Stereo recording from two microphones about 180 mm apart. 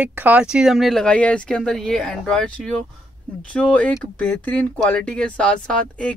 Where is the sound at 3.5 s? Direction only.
5° left (ahead or behind).